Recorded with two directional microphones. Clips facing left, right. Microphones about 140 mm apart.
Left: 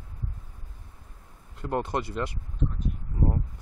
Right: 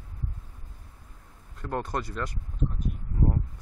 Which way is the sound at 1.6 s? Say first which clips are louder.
Left 3 dB; 15° left (ahead or behind).